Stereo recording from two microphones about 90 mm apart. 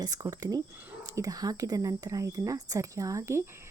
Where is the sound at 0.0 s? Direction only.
45° right (ahead or behind).